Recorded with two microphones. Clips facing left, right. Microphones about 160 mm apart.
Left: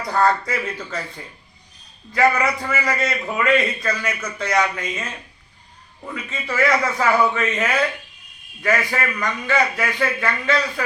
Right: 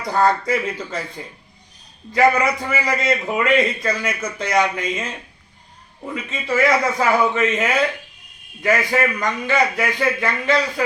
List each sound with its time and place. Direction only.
0.1 s a man's voice: 20° right (ahead or behind)
2.1 s a man's voice: 20° right (ahead or behind)
6.5 s a man's voice: 15° right (ahead or behind)